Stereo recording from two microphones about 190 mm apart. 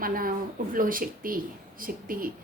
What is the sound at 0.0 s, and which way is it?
A woman's voice, 50° right (ahead or behind).